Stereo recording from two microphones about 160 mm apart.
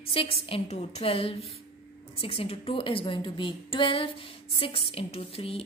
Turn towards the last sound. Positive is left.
turn(degrees=35)  # may be behind; listen again after turning